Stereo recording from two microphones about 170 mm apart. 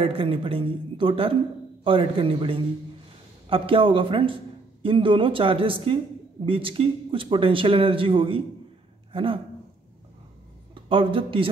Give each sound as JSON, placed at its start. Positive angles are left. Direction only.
{"t": 0.0, "sound": "speech", "side_deg": -35}
{"t": 10.7, "sound": "speech", "side_deg": -30}